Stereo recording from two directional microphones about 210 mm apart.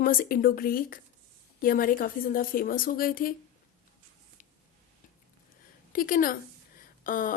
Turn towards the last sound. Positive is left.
turn(degrees=40)  # may be behind; listen again after turning